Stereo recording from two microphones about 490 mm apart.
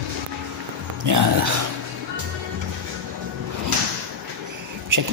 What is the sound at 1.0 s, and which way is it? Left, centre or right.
Speech, right.